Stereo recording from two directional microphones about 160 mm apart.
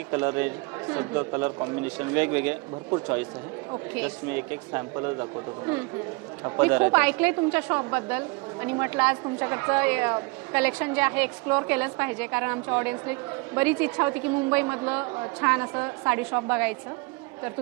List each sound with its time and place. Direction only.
0.1 s a woman's voice: 15° right (ahead or behind)
3.9 s a woman's voice: 15° right (ahead or behind)